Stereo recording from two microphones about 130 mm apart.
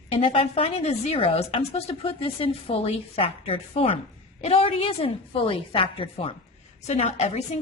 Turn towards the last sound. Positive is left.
turn(degrees=55)  # may be behind; listen again after turning